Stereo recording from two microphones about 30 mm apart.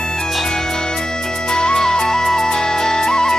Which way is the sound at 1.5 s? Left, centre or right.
Left.